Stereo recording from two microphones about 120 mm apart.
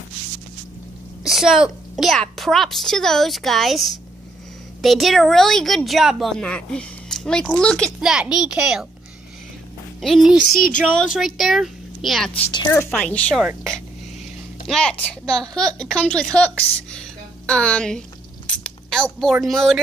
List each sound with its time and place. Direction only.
1.2 s a woman's voice: 5° right (ahead or behind)
8.0 s a woman's voice: 5° right (ahead or behind)
10.0 s a woman's voice: centre (ahead or behind)
12.4 s a woman's voice: 30° left (ahead or behind)
12.9 s a woman's voice: 10° left (ahead or behind)
14.7 s a woman's voice: 5° left (ahead or behind)
18.6 s a sound: 5° left (ahead or behind)
19.4 s a woman's voice: centre (ahead or behind)